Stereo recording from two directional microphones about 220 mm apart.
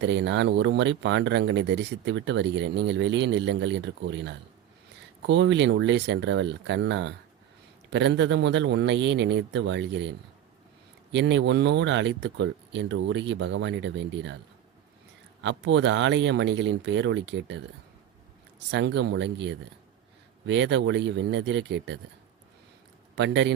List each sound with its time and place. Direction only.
0.0 s speech: 55° right (ahead or behind)
15.4 s speech: 55° right (ahead or behind)
18.7 s speech: 55° right (ahead or behind)
23.1 s speech: 55° right (ahead or behind)